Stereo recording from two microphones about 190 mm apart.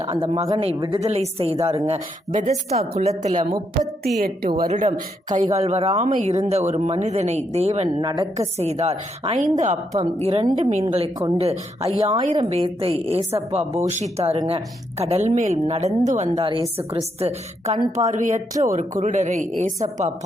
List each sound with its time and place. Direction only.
0.1 s a woman's voice: 35° right (ahead or behind)
1.0 s speech: 35° right (ahead or behind)
8.0 s a woman's voice: 20° right (ahead or behind)
8.4 s a woman's voice: 35° right (ahead or behind)